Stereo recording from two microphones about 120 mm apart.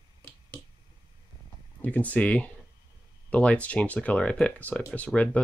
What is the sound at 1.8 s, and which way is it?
Speech, 15° left (ahead or behind).